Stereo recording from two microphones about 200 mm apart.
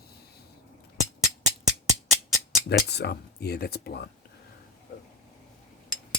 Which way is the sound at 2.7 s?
55° left (ahead or behind).